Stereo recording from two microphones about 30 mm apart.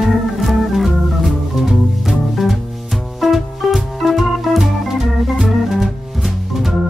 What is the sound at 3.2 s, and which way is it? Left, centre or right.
Music, centre.